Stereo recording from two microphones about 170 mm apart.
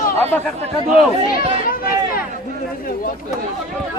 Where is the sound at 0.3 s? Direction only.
10° left (ahead or behind).